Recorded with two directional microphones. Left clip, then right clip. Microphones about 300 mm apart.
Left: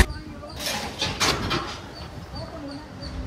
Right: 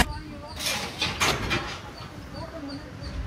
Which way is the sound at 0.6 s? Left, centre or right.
Left.